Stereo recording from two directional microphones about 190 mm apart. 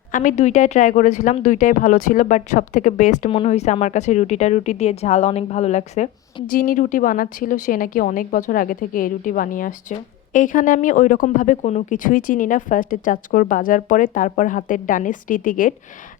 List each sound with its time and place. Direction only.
0.1 s speech: 40° left (ahead or behind)
6.5 s speech: 45° left (ahead or behind)